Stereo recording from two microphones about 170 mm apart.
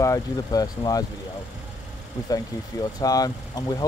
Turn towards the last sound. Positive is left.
turn(degrees=20)  # may be behind; listen again after turning